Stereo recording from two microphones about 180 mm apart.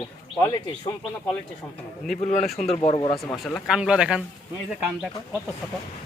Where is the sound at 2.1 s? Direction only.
40° left (ahead or behind).